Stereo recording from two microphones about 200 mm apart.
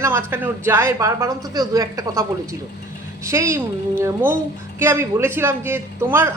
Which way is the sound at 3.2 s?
15° right (ahead or behind).